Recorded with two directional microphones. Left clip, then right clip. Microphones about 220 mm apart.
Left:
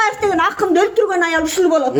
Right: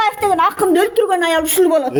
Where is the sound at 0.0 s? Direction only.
40° right (ahead or behind).